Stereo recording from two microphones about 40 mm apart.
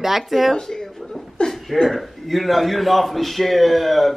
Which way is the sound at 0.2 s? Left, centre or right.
Centre.